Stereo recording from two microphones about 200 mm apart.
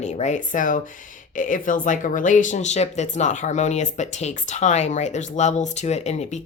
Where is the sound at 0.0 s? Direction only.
35° left (ahead or behind).